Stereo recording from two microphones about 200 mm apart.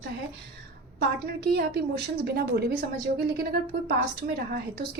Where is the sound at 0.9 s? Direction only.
55° right (ahead or behind).